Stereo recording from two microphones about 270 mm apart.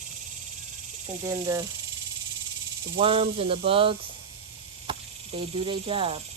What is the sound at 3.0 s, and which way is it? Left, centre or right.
Speech, centre.